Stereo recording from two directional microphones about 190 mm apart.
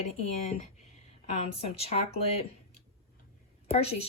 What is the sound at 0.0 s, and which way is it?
A woman's voice, 35° left (ahead or behind).